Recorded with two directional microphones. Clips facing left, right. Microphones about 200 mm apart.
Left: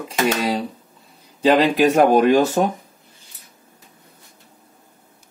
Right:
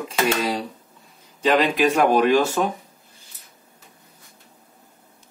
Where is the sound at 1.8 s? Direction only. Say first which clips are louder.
Left 4 dB; 40° left (ahead or behind).